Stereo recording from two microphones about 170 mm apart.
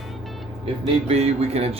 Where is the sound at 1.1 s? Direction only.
40° right (ahead or behind).